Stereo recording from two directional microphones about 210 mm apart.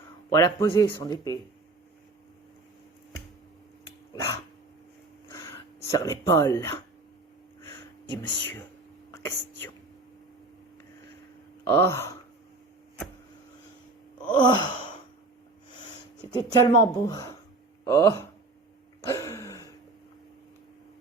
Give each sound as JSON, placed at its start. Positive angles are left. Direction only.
{"t": 0.3, "sound": "speech", "side_deg": 15}
{"t": 4.1, "sound": "dog", "side_deg": 15}
{"t": 5.3, "sound": "a sound", "side_deg": 15}
{"t": 8.1, "sound": "speech", "side_deg": 20}
{"t": 11.7, "sound": "speech", "side_deg": 10}
{"t": 14.2, "sound": "wail", "side_deg": 20}
{"t": 16.3, "sound": "speech", "side_deg": 15}
{"t": 19.0, "sound": "a sound", "side_deg": 15}